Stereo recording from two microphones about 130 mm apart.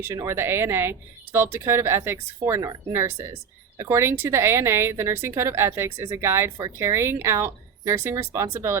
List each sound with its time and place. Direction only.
0.0 s speech: 20° right (ahead or behind)